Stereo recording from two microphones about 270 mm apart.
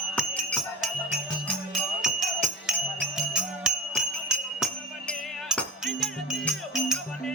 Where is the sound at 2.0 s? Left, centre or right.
Centre.